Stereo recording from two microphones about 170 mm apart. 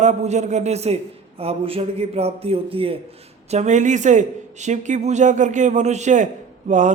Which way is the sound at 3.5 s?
45° right (ahead or behind).